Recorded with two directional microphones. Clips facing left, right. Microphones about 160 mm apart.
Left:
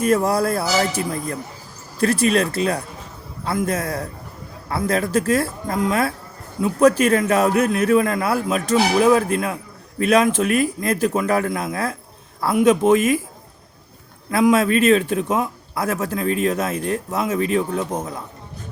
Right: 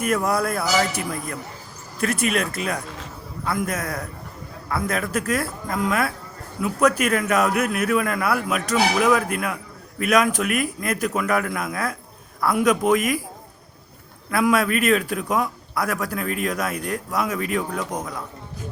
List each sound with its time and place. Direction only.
0.0 s a man's voice: 30° left (ahead or behind)
14.3 s a man's voice: 25° left (ahead or behind)